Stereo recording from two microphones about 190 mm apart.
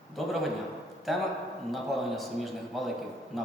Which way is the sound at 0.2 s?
Centre (ahead or behind).